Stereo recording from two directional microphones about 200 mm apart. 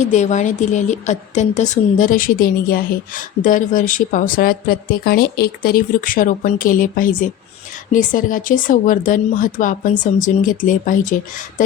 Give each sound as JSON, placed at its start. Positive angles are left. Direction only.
{"t": 0.0, "sound": "speech", "side_deg": 35}